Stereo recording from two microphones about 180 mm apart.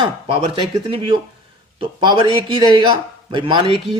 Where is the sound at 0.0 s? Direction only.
30° right (ahead or behind).